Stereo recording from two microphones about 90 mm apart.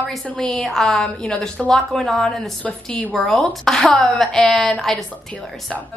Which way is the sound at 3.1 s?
Centre (ahead or behind).